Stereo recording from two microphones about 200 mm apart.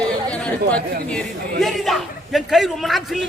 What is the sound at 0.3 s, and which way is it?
Chatter, 5° left (ahead or behind).